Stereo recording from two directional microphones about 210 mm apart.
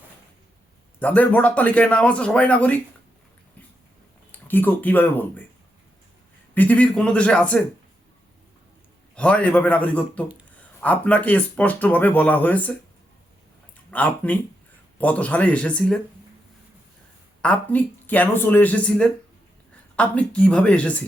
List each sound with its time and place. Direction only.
0.9 s speech: 5° left (ahead or behind)
4.3 s speech: 10° left (ahead or behind)
6.5 s a man's voice: 5° left (ahead or behind)
9.1 s speech: 5° left (ahead or behind)
13.9 s speech: 5° left (ahead or behind)
17.4 s a man's voice: 5° left (ahead or behind)